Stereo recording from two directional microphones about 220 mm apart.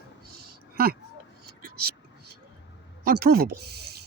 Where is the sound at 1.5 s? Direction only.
45° right (ahead or behind).